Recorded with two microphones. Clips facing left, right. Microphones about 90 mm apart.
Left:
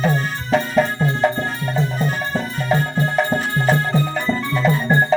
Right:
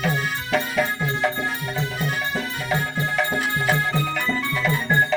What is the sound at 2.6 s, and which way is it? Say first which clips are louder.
Music: left 6 dB; 35° left (ahead or behind).